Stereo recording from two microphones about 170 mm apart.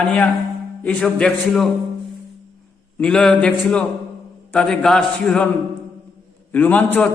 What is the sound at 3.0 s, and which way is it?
A man's voice, 5° left (ahead or behind).